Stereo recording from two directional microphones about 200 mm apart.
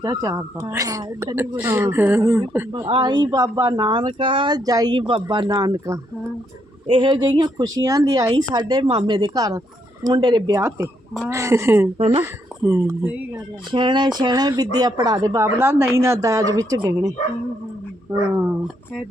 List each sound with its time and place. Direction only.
0.0 s speech: 15° right (ahead or behind)
2.9 s speech: 20° right (ahead or behind)
11.9 s speech: 30° right (ahead or behind)
12.2 s speech: 15° right (ahead or behind)
13.7 s speech: 25° right (ahead or behind)